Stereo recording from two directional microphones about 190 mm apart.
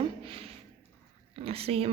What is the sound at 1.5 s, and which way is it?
Speech, 30° right (ahead or behind).